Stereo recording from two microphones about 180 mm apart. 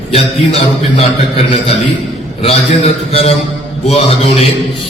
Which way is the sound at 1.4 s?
30° left (ahead or behind).